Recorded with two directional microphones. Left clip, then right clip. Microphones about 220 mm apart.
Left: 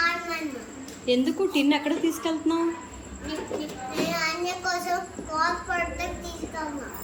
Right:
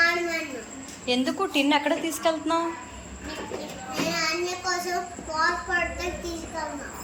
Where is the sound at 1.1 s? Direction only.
5° left (ahead or behind).